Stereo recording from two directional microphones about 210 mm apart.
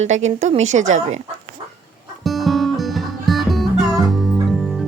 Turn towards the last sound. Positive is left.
turn(degrees=0)  # may be behind; listen again after turning